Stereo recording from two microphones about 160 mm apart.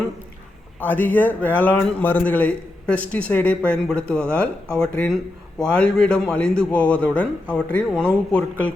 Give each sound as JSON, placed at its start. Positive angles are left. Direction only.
{"t": 0.8, "sound": "a man's voice", "side_deg": 10}